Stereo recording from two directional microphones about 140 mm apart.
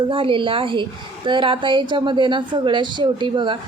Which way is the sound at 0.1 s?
40° right (ahead or behind).